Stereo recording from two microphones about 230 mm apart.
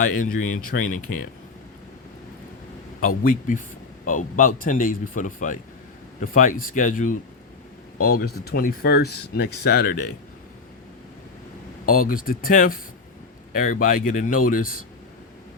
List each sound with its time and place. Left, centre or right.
0.0 s speech: left
3.2 s speech: left
11.9 s speech: left